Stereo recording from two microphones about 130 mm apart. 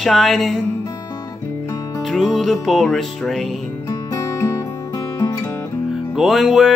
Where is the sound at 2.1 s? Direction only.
Centre (ahead or behind).